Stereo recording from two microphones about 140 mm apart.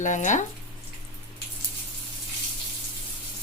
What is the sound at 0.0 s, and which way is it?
Speech, 60° left (ahead or behind).